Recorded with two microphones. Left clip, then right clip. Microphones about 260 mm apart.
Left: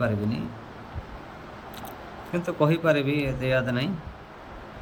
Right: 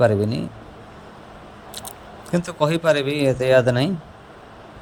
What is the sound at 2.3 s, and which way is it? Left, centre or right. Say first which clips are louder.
A man's voice: right 3 dB; centre.